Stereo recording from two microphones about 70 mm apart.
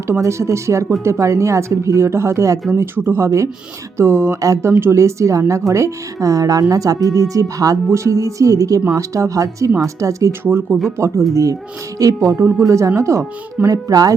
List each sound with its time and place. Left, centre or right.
0.2 s speech: right
3.2 s speech: right
4.4 s speech: right
4.7 s speech: right
10.4 s speech: right
11.0 s speech: right